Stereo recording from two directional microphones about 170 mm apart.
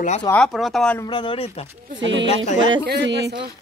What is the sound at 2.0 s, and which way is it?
Speech, 90° right.